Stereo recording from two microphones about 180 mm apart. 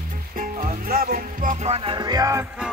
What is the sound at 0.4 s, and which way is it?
Music, 50° right (ahead or behind).